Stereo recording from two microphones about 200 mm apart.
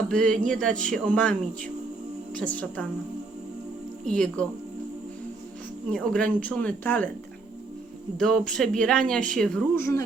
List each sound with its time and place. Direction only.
0.1 s speech: 5° left (ahead or behind)
4.0 s speech: 5° left (ahead or behind)
5.9 s speech: 5° left (ahead or behind)
8.2 s speech: centre (ahead or behind)